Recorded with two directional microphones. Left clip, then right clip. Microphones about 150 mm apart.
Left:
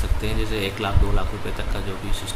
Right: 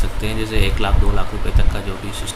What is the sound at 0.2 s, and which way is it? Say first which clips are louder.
Speech: right 4 dB; 10° right (ahead or behind).